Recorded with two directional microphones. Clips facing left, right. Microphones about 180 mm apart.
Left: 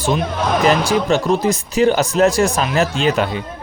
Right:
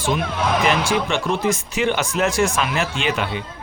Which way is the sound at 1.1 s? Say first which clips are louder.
Left 5 dB; 35° left (ahead or behind).